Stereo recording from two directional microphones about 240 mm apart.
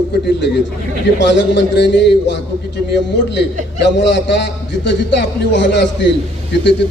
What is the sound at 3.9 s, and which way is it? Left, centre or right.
A man's voice, left.